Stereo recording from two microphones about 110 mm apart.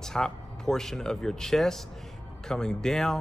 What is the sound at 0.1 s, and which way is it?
A man's voice, 5° left (ahead or behind).